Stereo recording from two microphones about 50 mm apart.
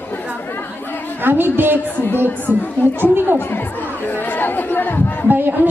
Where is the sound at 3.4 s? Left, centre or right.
Left.